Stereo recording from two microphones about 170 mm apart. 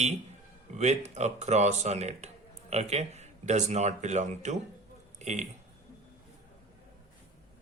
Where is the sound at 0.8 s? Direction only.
40° right (ahead or behind).